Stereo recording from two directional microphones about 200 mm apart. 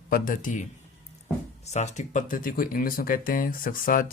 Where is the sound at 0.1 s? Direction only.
40° left (ahead or behind).